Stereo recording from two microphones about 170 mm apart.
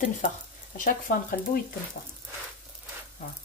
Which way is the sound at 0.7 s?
50° left (ahead or behind).